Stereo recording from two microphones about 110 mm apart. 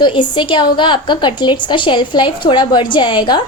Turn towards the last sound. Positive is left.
turn(degrees=45)  # may be behind; listen again after turning